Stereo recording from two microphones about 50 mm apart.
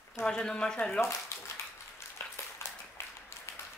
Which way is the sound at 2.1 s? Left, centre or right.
Left.